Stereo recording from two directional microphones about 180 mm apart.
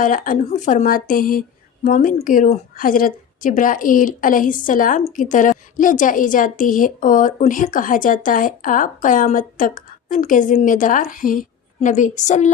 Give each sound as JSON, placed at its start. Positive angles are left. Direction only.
{"t": 0.0, "sound": "speech", "side_deg": 45}